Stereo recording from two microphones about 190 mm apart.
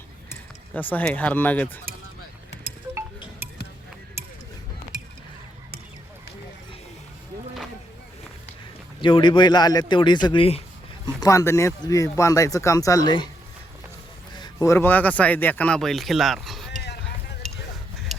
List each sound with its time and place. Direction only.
0.7 s speech: 10° left (ahead or behind)
9.0 s speech: 25° left (ahead or behind)
11.0 s speech: 20° left (ahead or behind)
14.3 s speech: 20° left (ahead or behind); by 16.6 s centre (ahead or behind)